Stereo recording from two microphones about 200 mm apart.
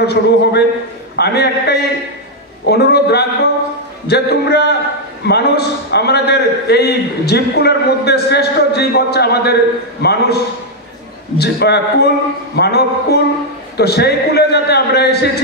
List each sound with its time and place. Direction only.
0.0 s a man's voice: 55° left (ahead or behind)